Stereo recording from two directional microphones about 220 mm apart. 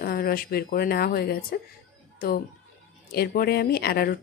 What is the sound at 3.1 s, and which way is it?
Speech, 45° left (ahead or behind).